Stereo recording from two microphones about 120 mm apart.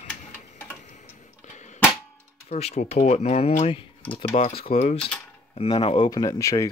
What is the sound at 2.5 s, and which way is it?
Speech, 65° left (ahead or behind).